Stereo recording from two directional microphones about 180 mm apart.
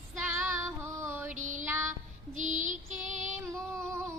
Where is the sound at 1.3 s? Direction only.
45° right (ahead or behind).